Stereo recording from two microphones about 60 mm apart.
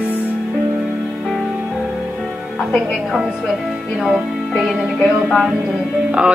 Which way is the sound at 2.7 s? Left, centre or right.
Centre.